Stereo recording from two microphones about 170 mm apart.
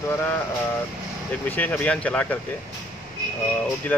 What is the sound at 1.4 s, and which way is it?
Speech, 10° left (ahead or behind).